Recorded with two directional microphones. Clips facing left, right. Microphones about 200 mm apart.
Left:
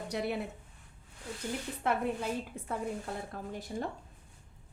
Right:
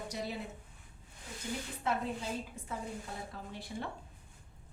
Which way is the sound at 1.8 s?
60° left (ahead or behind).